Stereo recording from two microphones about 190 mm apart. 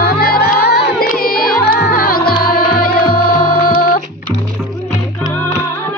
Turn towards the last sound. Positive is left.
turn(degrees=50)  # may be behind; listen again after turning